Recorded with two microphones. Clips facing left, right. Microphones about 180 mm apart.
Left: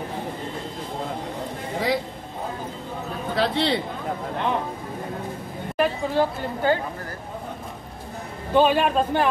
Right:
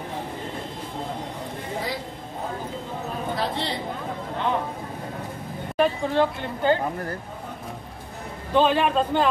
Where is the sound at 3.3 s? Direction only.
75° left (ahead or behind).